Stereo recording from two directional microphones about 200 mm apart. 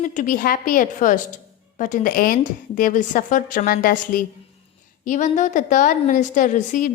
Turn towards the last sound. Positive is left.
turn(degrees=40)  # may be behind; listen again after turning